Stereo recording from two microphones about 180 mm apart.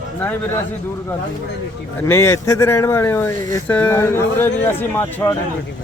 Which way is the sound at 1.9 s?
15° left (ahead or behind).